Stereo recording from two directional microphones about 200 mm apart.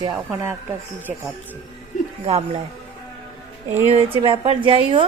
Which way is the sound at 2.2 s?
30° right (ahead or behind).